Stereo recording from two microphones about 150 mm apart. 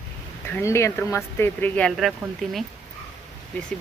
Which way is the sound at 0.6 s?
20° left (ahead or behind).